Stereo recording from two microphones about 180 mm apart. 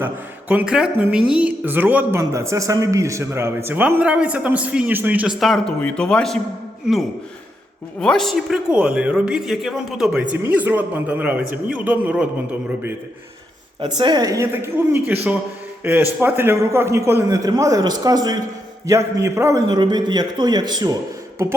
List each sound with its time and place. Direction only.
0.0 s a woman's voice: 10° right (ahead or behind)
8.0 s a woman's voice: 5° left (ahead or behind)
14.0 s a woman's voice: 20° right (ahead or behind)